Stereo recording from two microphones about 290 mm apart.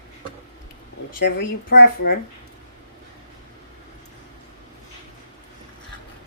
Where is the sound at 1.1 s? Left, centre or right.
Left.